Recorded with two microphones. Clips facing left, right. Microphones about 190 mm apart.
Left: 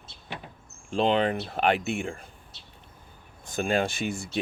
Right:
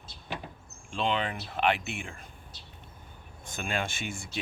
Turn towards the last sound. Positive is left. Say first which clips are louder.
# left 7 dB
turn(degrees=40)  # may be behind; listen again after turning